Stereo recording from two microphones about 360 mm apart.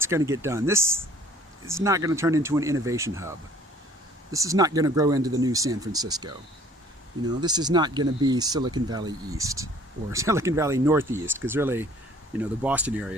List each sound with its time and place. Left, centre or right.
0.0 s speech: centre